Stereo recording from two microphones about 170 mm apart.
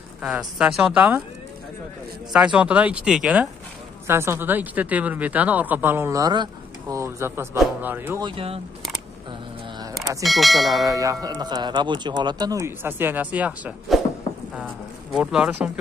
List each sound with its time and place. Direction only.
0.2 s speech: 5° right (ahead or behind)
2.3 s a woman's voice: 5° right (ahead or behind)
8.2 s speech: 30° right (ahead or behind)
10.2 s speech: centre (ahead or behind)
10.8 s speech: 20° right (ahead or behind); by 14.0 s 5° right (ahead or behind)
15.1 s speech: 5° right (ahead or behind)